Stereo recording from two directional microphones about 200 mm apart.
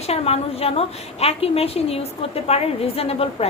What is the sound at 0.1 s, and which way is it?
A woman's voice, 30° left (ahead or behind).